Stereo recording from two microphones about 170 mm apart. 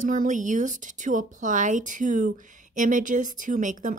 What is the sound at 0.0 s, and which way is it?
Speech, 50° right (ahead or behind).